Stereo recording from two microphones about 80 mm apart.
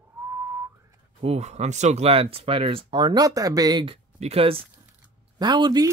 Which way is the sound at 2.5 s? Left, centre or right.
Right.